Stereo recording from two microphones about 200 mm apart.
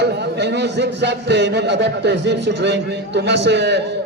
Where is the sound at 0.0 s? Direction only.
55° right (ahead or behind).